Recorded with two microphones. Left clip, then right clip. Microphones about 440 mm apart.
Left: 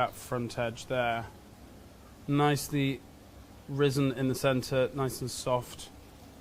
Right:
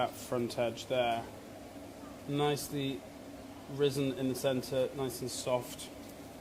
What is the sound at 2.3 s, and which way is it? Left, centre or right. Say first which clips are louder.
Speech: left 5 dB; left.